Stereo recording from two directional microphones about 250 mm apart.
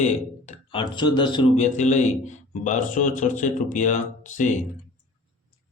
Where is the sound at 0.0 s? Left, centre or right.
Left.